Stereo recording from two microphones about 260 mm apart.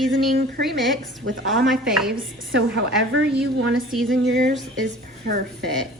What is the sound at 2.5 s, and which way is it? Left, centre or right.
Speech, right.